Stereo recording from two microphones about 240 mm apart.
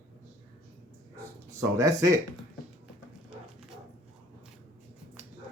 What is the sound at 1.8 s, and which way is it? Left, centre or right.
Speech, centre.